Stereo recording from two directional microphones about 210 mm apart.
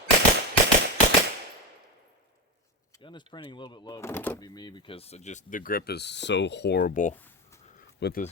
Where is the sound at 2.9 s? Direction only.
20° left (ahead or behind); by 7.1 s 40° left (ahead or behind).